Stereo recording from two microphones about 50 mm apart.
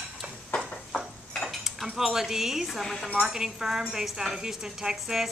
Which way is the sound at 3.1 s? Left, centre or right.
Centre.